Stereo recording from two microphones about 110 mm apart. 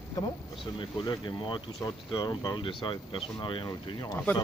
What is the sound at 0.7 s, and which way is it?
Speech, 45° left (ahead or behind).